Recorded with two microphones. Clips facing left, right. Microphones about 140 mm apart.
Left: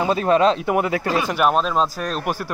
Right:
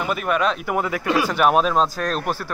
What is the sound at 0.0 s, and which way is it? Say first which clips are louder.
Speech: left 5 dB; 30° left (ahead or behind).